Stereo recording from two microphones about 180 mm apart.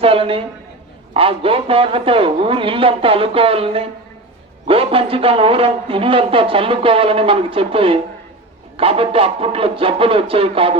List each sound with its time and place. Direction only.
0.0 s a woman's voice: 30° right (ahead or behind)